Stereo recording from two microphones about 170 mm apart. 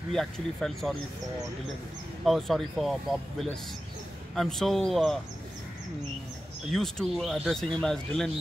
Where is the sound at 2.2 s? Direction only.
Centre (ahead or behind).